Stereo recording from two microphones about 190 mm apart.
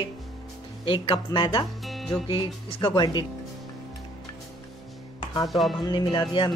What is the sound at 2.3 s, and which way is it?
Speech, 25° left (ahead or behind).